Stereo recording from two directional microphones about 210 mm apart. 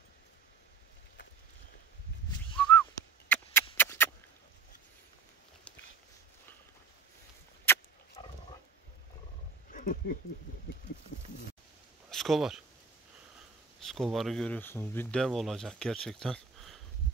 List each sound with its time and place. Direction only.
2.6 s whistling: 5° left (ahead or behind)
2.9 s a sound: 10° left (ahead or behind)
3.7 s rodents: 10° left (ahead or behind)
7.7 s dog: 10° left (ahead or behind)
8.2 s dog: 25° left (ahead or behind)
9.7 s wild animals: 40° left (ahead or behind)
12.1 s speech: centre (ahead or behind)
13.8 s speech: centre (ahead or behind)